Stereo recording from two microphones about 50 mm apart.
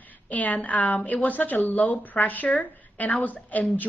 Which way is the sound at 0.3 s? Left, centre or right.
Left.